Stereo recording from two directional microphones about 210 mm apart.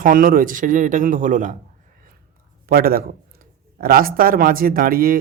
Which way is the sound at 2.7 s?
45° right (ahead or behind).